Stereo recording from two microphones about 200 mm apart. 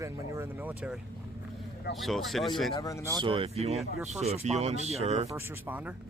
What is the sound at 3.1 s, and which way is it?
Speech, 25° right (ahead or behind).